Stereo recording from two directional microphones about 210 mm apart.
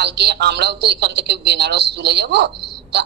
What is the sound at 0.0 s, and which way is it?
A woman's voice, 55° right (ahead or behind).